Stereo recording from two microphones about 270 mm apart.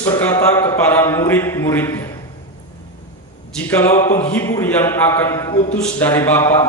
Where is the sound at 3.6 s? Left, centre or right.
Centre.